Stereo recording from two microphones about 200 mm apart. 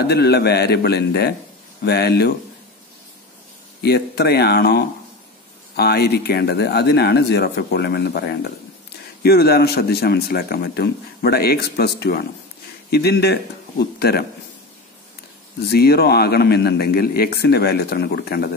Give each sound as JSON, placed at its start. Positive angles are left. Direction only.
{"t": 0.0, "sound": "speech", "side_deg": 55}
{"t": 3.8, "sound": "speech", "side_deg": 55}
{"t": 15.7, "sound": "speech", "side_deg": 50}